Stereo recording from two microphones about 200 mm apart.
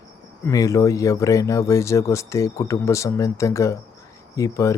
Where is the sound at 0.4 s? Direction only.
15° left (ahead or behind).